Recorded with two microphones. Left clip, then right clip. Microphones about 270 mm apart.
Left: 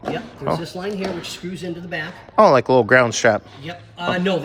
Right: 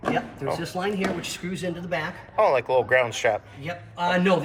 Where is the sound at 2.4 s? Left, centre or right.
Left.